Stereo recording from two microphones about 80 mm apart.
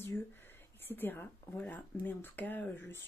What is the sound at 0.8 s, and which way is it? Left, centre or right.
Speech, left.